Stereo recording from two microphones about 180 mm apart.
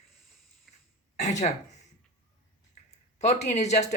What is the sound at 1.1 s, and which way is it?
Speech, 40° left (ahead or behind).